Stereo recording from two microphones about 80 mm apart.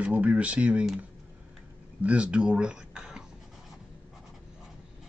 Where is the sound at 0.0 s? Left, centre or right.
Centre.